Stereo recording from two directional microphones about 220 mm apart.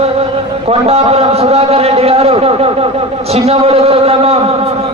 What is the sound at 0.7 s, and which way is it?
A man's voice, 25° right (ahead or behind).